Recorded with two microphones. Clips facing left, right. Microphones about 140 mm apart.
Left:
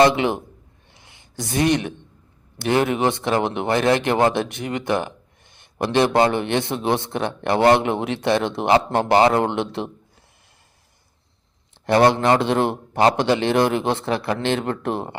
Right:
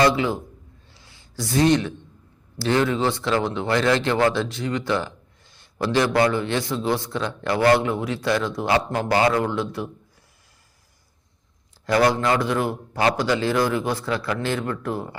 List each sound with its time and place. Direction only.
0.0 s a man's voice: 20° left (ahead or behind)
0.9 s a sound: 20° left (ahead or behind)
2.6 s a man's voice: 20° left (ahead or behind)
11.9 s a man's voice: 25° left (ahead or behind)